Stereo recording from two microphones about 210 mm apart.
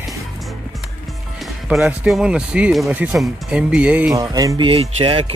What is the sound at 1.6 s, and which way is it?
Speech, 5° right (ahead or behind).